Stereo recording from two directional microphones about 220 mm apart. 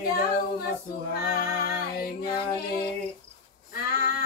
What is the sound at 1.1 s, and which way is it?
Music, 45° left (ahead or behind).